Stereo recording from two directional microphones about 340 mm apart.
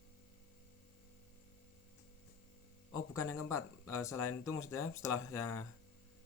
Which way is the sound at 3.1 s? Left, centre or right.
Centre.